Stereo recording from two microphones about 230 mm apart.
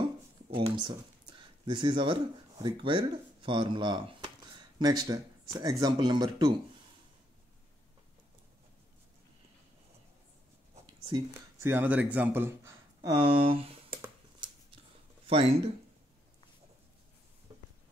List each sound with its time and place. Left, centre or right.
0.6 s speech: right
11.6 s a sound: centre
15.2 s speech: right